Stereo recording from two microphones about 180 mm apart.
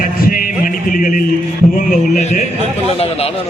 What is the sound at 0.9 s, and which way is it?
Speech, 50° left (ahead or behind).